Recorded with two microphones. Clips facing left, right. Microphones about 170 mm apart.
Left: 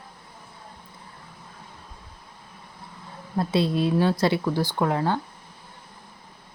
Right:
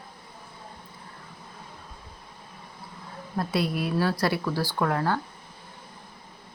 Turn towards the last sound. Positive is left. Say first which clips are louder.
# left 2 dB
turn(degrees=20)  # may be behind; listen again after turning